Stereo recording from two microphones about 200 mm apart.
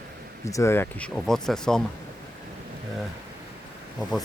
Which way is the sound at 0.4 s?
15° left (ahead or behind).